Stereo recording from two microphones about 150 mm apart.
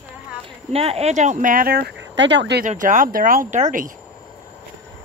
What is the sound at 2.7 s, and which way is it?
Speech, 60° right (ahead or behind).